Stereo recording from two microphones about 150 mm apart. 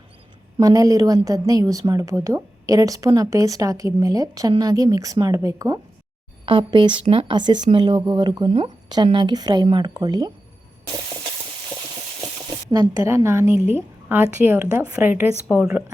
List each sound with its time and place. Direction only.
0.6 s a woman's voice: 25° right (ahead or behind)
6.4 s a woman's voice: 35° right (ahead or behind)
12.7 s a woman's voice: 25° right (ahead or behind); by 15.7 s 5° right (ahead or behind)